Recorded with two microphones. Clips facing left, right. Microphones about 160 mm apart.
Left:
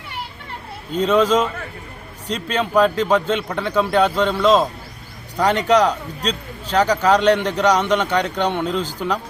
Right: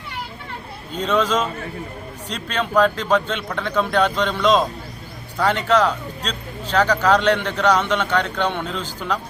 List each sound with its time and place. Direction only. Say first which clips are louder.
1.0 s speech: left 4 dB; 10° left (ahead or behind)